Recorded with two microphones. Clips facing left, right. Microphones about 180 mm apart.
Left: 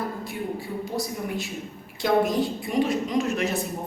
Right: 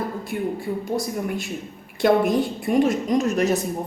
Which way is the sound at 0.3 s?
55° right (ahead or behind).